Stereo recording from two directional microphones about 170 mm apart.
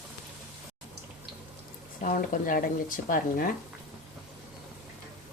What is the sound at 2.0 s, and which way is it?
Speech, 50° left (ahead or behind).